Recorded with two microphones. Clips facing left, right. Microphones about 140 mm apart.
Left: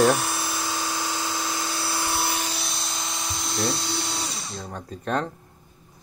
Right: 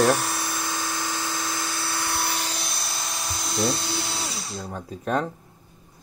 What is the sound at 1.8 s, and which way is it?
Dental drill, 25° left (ahead or behind).